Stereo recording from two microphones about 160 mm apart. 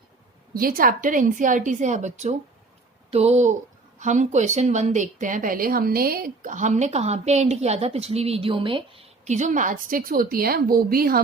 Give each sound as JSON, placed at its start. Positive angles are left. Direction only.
{"t": 0.5, "sound": "a woman's voice", "side_deg": -65}